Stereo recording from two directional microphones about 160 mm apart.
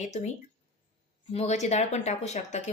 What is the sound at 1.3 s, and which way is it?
A woman's voice, 45° left (ahead or behind).